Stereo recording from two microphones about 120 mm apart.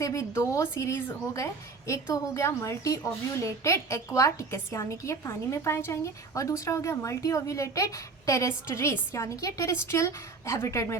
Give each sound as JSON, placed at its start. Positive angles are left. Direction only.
{"t": 0.0, "sound": "a woman's voice", "side_deg": 25}